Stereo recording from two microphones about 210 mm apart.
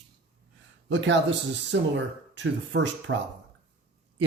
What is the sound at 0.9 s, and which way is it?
Speech, 60° right (ahead or behind).